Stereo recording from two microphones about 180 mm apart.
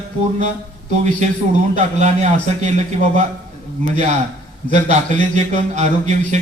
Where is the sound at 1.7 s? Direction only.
40° right (ahead or behind).